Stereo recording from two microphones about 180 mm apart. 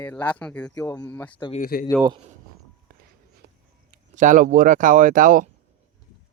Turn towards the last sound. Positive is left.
turn(degrees=-50)  # may be behind; listen again after turning